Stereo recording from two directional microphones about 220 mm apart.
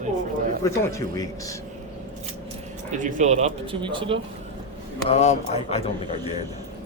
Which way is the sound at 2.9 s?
35° right (ahead or behind).